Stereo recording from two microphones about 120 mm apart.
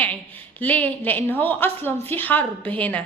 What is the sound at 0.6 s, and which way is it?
A woman's voice, 15° left (ahead or behind).